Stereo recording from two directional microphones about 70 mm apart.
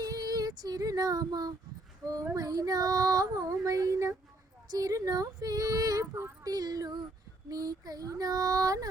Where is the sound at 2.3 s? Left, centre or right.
Right.